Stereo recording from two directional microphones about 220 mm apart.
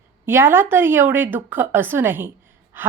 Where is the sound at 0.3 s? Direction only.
10° right (ahead or behind).